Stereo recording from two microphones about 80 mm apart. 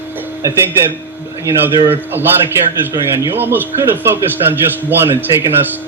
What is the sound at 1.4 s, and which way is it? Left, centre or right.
Speech, right.